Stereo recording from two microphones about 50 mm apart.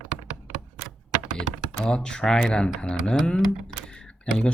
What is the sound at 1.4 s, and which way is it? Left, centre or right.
Speech, centre.